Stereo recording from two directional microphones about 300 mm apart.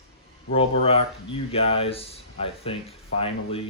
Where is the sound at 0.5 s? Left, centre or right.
Centre.